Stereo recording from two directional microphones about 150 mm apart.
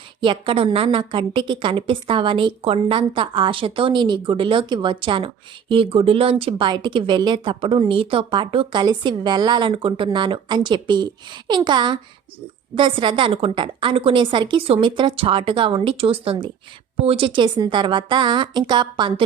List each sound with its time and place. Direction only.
0.2 s a woman's voice: 35° right (ahead or behind)